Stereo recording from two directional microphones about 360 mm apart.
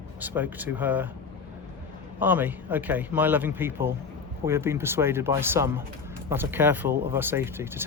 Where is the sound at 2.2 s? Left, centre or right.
Centre.